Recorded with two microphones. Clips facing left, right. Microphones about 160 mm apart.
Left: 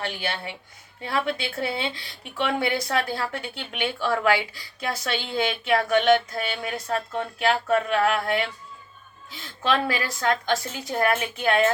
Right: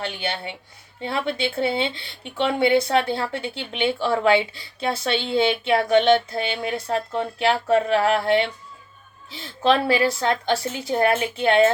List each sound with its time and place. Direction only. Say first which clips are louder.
0.0 s speech: right 2 dB; 25° right (ahead or behind)